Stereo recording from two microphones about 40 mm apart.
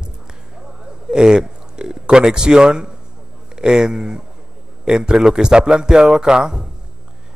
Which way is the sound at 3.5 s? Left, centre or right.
Centre.